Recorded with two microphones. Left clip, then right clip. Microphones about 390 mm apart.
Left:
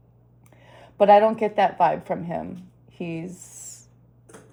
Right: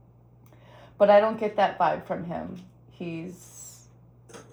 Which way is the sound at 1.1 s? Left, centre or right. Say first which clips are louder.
Left 5 dB; left.